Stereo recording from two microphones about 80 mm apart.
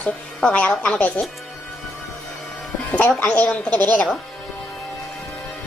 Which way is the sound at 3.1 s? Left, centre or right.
Centre.